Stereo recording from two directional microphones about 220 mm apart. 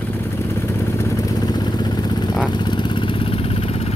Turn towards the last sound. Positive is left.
turn(degrees=25)  # may be behind; listen again after turning